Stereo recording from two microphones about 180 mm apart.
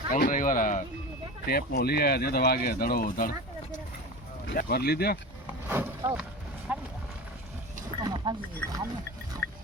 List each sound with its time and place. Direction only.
0.1 s speech: 50° left (ahead or behind)
1.5 s speech: 60° left (ahead or behind)
5.5 s vehicle: 10° right (ahead or behind)
6.7 s run: 10° right (ahead or behind)
8.1 s speech: 25° right (ahead or behind)